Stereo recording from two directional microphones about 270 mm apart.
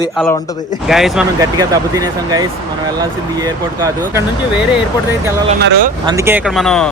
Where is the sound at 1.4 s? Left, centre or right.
Centre.